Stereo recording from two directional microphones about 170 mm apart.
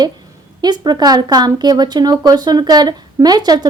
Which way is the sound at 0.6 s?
25° right (ahead or behind).